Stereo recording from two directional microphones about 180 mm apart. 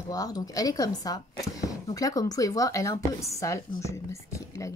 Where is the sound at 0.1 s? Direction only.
20° left (ahead or behind).